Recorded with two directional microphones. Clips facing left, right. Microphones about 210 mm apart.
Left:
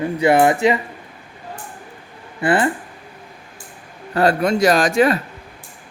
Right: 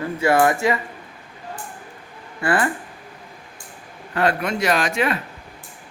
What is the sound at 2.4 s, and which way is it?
Speech, 20° left (ahead or behind).